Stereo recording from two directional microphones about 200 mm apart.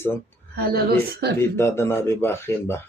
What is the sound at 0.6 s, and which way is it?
Speech, 50° right (ahead or behind).